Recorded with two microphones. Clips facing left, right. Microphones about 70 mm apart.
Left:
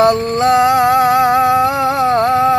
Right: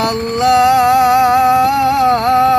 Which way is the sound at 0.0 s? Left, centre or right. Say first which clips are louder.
Left 2 dB; left.